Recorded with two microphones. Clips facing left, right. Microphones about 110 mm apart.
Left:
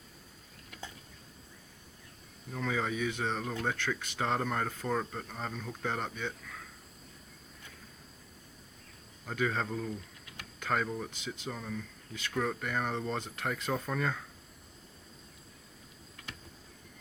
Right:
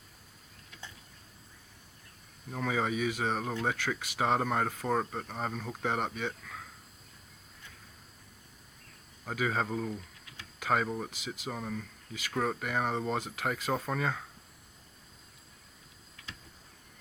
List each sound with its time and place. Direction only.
2.5 s speech: 15° right (ahead or behind)
3.4 s speech: 20° right (ahead or behind)
3.7 s speech: 10° right (ahead or behind)
9.2 s speech: 5° right (ahead or behind)